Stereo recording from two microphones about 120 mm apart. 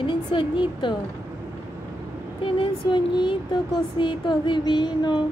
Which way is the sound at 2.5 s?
40° left (ahead or behind).